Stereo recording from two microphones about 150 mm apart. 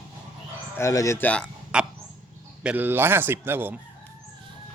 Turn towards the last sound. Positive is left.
turn(degrees=-15)  # may be behind; listen again after turning